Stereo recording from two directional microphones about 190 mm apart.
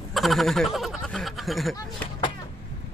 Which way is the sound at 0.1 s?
Centre (ahead or behind).